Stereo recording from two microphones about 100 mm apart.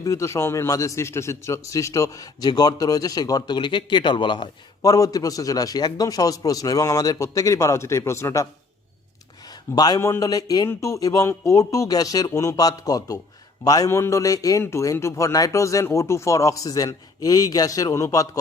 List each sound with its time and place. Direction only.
0.0 s a man's voice: 30° left (ahead or behind); by 4.4 s 55° left (ahead or behind)
4.8 s a man's voice: 40° left (ahead or behind)
9.7 s a man's voice: 40° left (ahead or behind)